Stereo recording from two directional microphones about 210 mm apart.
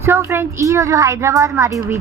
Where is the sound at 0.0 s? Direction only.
10° right (ahead or behind).